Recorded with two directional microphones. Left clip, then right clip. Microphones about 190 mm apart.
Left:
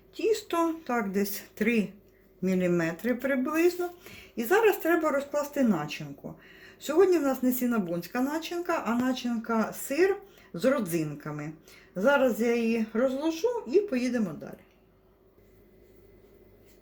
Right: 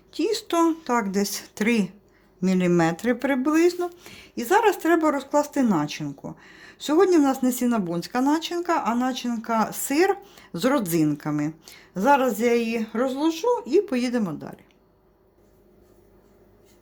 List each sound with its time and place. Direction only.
0.1 s speech: 65° right (ahead or behind)